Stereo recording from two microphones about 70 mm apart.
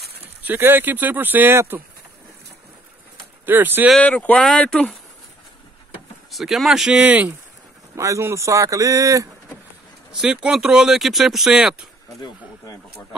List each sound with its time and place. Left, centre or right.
0.4 s speech: right
3.4 s speech: right
4.0 s speech: centre
6.3 s speech: centre; by 7.3 s right
7.9 s a man's voice: right
10.1 s speech: centre